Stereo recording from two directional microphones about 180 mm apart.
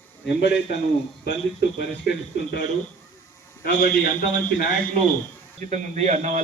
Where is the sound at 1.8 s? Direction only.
65° left (ahead or behind).